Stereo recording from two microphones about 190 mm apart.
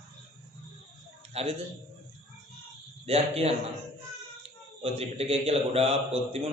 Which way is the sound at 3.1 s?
35° right (ahead or behind).